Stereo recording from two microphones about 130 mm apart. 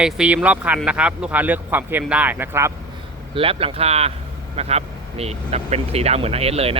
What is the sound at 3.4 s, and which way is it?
Speech, 45° right (ahead or behind).